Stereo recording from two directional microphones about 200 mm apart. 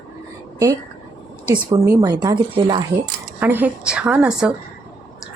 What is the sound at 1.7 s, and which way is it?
Speech, 20° right (ahead or behind).